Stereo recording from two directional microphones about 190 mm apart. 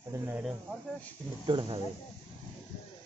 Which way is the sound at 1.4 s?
25° right (ahead or behind).